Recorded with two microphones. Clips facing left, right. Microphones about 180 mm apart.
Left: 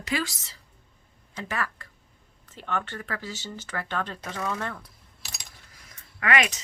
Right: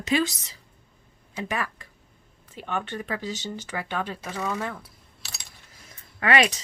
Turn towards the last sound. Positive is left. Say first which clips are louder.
# right 3 dB
turn(degrees=-30)  # may be behind; listen again after turning